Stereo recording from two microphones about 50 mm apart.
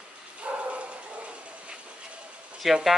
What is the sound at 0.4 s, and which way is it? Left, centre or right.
Bow-wow, right.